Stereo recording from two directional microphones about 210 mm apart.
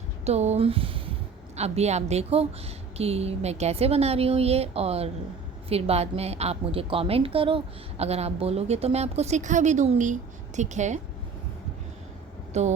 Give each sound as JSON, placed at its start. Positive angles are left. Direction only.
{"t": 0.3, "sound": "a woman's voice", "side_deg": -30}
{"t": 12.5, "sound": "a woman's voice", "side_deg": -35}